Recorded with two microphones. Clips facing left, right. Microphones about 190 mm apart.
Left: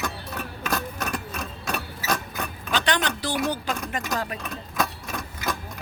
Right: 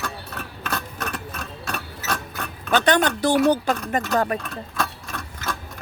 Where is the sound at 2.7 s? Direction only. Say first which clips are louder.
Right 7 dB; 50° right (ahead or behind).